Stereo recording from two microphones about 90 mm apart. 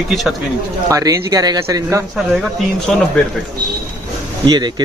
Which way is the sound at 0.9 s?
40° right (ahead or behind).